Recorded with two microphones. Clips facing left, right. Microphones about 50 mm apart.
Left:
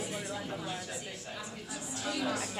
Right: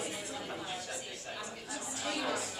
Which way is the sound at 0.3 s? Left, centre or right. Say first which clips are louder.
Left 2 dB; centre.